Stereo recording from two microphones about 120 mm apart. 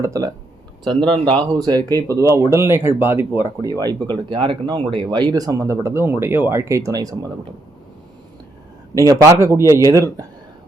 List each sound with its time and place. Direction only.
0.0 s speech: 25° right (ahead or behind)
0.9 s speech: 40° right (ahead or behind); by 3.4 s 15° right (ahead or behind)
3.6 s speech: 30° right (ahead or behind)
9.0 s speech: 25° right (ahead or behind)